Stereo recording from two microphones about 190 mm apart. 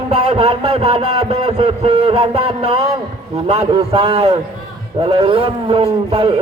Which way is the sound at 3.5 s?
30° right (ahead or behind).